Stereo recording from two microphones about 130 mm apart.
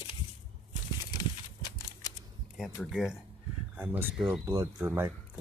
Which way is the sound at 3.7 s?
15° right (ahead or behind).